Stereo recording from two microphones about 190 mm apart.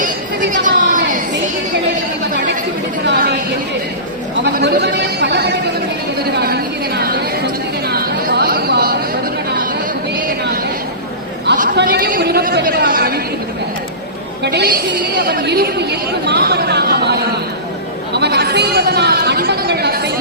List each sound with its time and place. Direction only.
0.6 s a sound: 45° right (ahead or behind)
3.1 s chatter: 60° right (ahead or behind)
4.5 s speech: 55° right (ahead or behind)
7.9 s chatter: 55° right (ahead or behind)
11.8 s chatter: 55° right (ahead or behind)
14.4 s speech: 60° right (ahead or behind)